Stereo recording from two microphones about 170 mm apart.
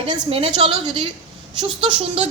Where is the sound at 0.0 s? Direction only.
35° right (ahead or behind).